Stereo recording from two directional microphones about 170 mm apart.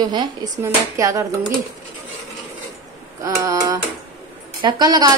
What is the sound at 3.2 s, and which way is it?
Speech, 20° right (ahead or behind).